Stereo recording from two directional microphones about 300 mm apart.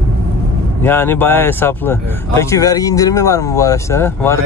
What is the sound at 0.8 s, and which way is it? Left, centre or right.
Speech, centre.